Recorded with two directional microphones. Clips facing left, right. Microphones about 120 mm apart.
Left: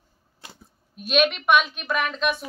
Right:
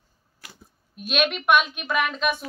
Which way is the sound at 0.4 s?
25° left (ahead or behind).